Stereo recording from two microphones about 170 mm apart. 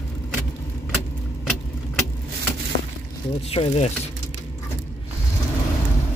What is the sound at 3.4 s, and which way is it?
Speech, 35° left (ahead or behind).